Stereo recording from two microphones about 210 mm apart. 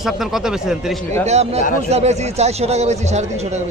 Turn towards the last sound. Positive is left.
turn(degrees=-30)  # may be behind; listen again after turning